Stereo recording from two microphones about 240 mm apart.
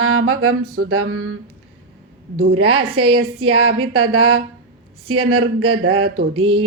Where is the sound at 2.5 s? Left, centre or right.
Right.